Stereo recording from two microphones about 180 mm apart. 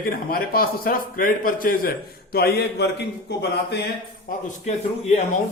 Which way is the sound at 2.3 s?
60° left (ahead or behind).